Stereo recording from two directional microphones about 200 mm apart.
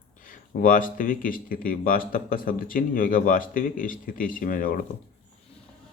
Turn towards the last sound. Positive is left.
turn(degrees=45)  # may be behind; listen again after turning